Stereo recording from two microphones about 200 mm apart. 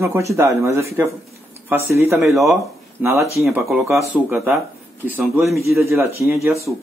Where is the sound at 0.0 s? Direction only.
15° right (ahead or behind).